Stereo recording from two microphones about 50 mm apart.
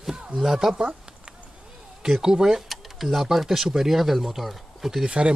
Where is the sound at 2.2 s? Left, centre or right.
Centre.